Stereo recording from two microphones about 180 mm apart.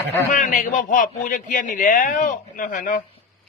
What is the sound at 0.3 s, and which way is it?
A man's voice, 45° left (ahead or behind).